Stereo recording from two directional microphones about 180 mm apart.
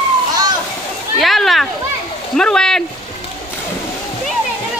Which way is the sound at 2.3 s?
5° left (ahead or behind).